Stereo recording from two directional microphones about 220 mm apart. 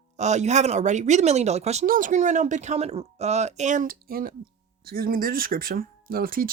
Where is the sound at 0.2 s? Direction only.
30° right (ahead or behind).